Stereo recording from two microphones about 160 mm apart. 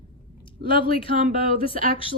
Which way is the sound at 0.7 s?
35° left (ahead or behind).